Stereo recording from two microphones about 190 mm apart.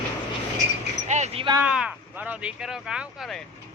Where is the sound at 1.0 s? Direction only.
35° right (ahead or behind).